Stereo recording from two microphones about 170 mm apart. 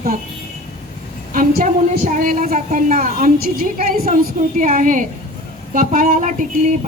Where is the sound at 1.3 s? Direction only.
50° right (ahead or behind).